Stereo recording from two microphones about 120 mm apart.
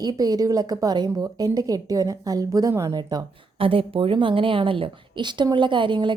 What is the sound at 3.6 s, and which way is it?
A woman's voice, 50° right (ahead or behind).